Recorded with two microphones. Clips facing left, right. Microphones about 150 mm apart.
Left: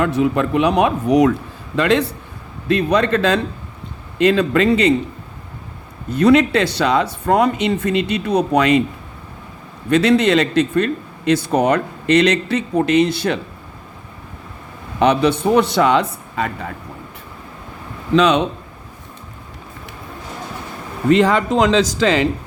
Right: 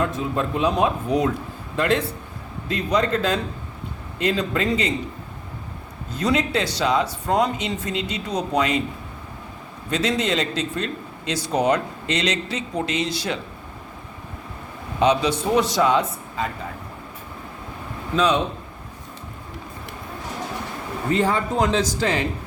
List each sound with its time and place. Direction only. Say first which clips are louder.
0.0 s a man's voice: left 7 dB; 75° left (ahead or behind); by 2.0 s 90° left
2.6 s speech: left 6 dB; 70° left (ahead or behind)
6.1 s a man's voice: left 10 dB; 65° left (ahead or behind)
9.9 s a man's voice: left 9 dB; 65° left (ahead or behind)
14.9 s a man's voice: left 4 dB; 60° left (ahead or behind)
18.1 s speech: left 6 dB; 80° left
21.1 s a man's voice: left 8 dB; 90° left